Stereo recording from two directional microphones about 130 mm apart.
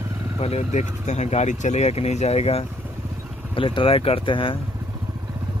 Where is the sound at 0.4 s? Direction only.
55° left (ahead or behind).